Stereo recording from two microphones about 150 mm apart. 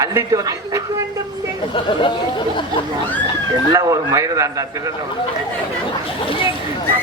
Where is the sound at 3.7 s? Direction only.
20° right (ahead or behind).